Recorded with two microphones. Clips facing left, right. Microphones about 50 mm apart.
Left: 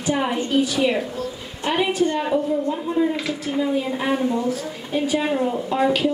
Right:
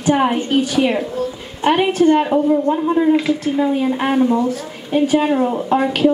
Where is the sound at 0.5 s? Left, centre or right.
Right.